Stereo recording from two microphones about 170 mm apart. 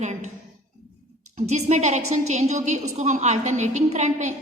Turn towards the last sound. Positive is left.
turn(degrees=-45)  # may be behind; listen again after turning